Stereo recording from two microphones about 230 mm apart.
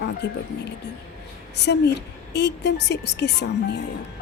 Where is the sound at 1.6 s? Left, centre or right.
Left.